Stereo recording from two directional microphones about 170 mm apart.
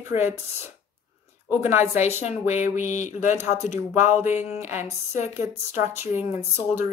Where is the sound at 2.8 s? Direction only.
45° left (ahead or behind).